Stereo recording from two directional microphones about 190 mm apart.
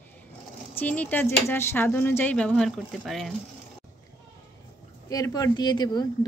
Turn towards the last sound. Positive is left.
turn(degrees=20)  # may be behind; listen again after turning